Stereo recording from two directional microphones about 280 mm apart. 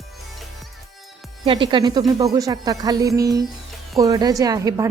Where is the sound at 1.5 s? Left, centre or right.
Centre.